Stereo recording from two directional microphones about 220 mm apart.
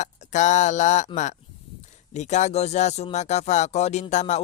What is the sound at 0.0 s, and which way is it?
Speech, 35° left (ahead or behind).